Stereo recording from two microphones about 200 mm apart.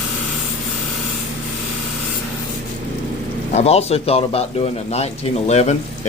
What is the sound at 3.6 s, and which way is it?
Speech, 30° left (ahead or behind).